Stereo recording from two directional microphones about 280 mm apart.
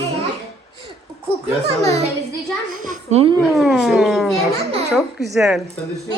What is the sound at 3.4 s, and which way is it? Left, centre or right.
A woman's voice, centre.